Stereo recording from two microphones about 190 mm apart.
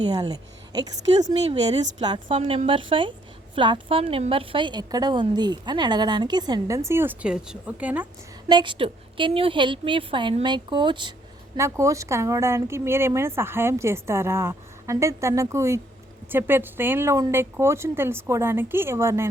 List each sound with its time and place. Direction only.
0.1 s a woman's voice: 20° right (ahead or behind)
8.4 s a woman's voice: 25° right (ahead or behind)